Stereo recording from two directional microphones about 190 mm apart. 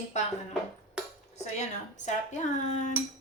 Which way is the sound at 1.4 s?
40° left (ahead or behind).